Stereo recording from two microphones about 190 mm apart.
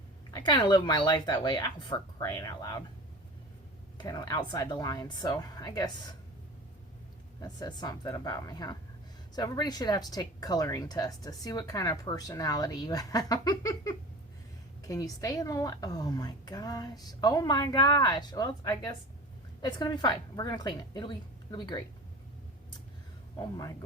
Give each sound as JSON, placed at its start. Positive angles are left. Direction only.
{"t": 0.3, "sound": "speech", "side_deg": 25}
{"t": 3.9, "sound": "speech", "side_deg": 20}
{"t": 7.3, "sound": "speech", "side_deg": 20}
{"t": 23.4, "sound": "speech", "side_deg": 20}